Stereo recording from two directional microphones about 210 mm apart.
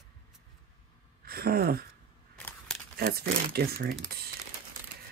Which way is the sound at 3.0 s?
45° right (ahead or behind).